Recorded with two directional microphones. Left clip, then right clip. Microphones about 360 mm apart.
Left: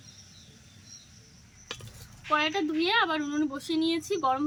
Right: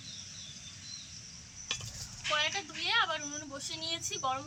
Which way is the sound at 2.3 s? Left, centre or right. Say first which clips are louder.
Left 7 dB; centre.